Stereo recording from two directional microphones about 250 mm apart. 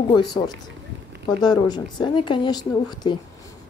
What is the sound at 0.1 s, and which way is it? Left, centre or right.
A woman's voice, centre.